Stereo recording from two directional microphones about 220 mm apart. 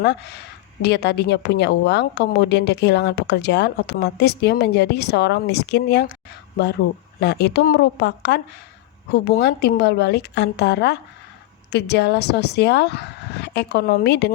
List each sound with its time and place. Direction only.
0.0 s a woman's voice: 50° left (ahead or behind)
7.2 s a woman's voice: 50° left (ahead or behind)